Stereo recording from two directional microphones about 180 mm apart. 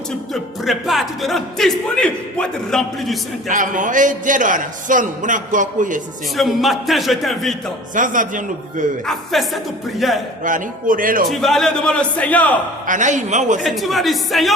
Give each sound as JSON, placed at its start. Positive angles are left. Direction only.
{"t": 0.6, "sound": "speech", "side_deg": 0}
{"t": 3.5, "sound": "a man's voice", "side_deg": -45}
{"t": 6.3, "sound": "speech", "side_deg": 0}
{"t": 7.9, "sound": "a man's voice", "side_deg": -45}
{"t": 9.0, "sound": "speech", "side_deg": 0}
{"t": 10.4, "sound": "a man's voice", "side_deg": -50}
{"t": 11.3, "sound": "speech", "side_deg": 0}
{"t": 12.9, "sound": "a man's voice", "side_deg": -45}
{"t": 13.6, "sound": "speech", "side_deg": 0}